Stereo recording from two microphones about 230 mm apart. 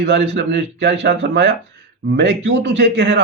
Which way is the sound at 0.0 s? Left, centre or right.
Right.